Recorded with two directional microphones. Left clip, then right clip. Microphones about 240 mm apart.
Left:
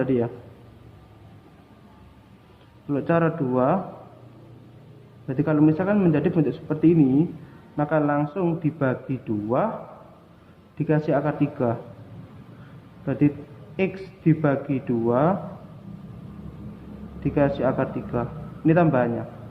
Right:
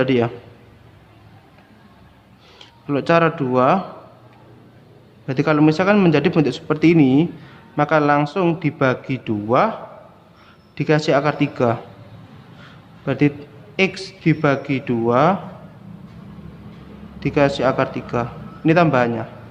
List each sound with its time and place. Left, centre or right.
0.0 s a man's voice: right
2.8 s a man's voice: right
5.2 s a man's voice: right
10.8 s a man's voice: right
13.1 s a man's voice: right
17.2 s a man's voice: right